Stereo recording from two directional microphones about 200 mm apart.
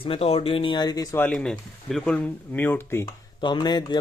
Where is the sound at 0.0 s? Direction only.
30° left (ahead or behind).